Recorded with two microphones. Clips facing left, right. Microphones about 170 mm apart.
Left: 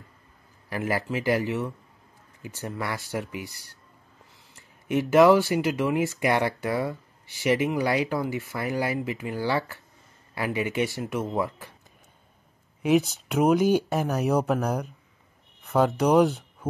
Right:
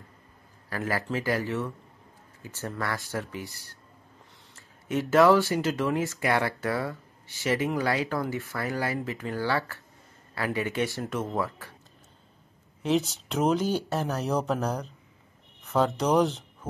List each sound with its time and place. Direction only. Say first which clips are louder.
0.7 s speech: left 2 dB; 15° left (ahead or behind)
12.8 s speech: left 4 dB; 10° left (ahead or behind)
15.6 s a sound: left 3 dB; 10° left (ahead or behind)
16.0 s speech: left 4 dB; 10° left (ahead or behind)